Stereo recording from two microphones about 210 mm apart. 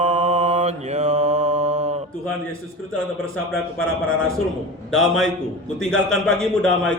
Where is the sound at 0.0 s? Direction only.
35° right (ahead or behind).